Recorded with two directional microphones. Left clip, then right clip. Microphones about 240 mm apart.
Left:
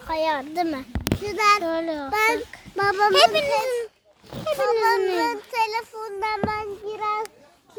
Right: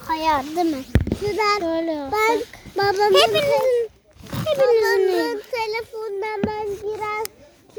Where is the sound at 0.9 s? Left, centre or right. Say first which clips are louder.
Right 5 dB; right.